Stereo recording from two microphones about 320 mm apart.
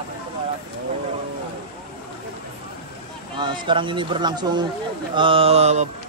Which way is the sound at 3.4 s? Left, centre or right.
Centre.